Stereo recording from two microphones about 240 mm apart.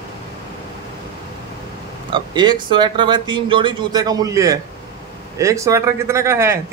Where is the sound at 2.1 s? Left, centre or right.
Centre.